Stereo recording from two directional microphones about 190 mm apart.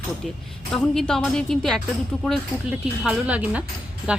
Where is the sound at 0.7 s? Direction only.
5° left (ahead or behind).